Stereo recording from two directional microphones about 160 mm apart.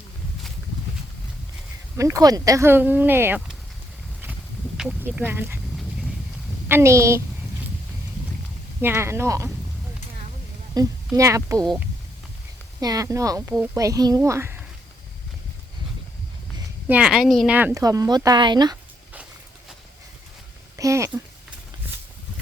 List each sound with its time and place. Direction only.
2.0 s speech: 20° right (ahead or behind)
5.0 s speech: 10° right (ahead or behind)
6.7 s speech: 15° right (ahead or behind)
8.8 s speech: 15° right (ahead or behind)
10.8 s speech: 20° right (ahead or behind)
12.8 s speech: 20° right (ahead or behind)
16.9 s a woman's voice: 5° right (ahead or behind)
17.7 s speech: 20° right (ahead or behind)
20.7 s a sound: 20° right (ahead or behind)